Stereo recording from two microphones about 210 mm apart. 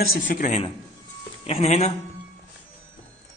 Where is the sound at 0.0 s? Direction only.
45° left (ahead or behind).